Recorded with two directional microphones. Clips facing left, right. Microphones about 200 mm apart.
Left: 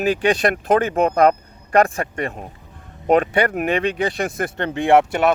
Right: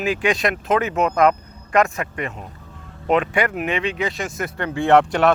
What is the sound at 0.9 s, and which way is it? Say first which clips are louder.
Speech: left 2 dB; 50° left (ahead or behind).